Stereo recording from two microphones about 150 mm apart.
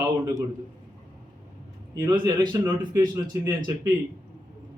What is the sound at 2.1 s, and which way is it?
Speech, 30° right (ahead or behind).